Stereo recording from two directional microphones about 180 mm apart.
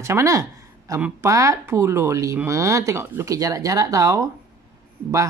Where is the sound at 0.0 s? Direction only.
15° right (ahead or behind).